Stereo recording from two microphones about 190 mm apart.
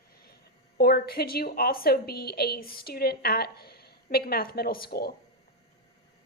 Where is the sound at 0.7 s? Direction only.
55° left (ahead or behind).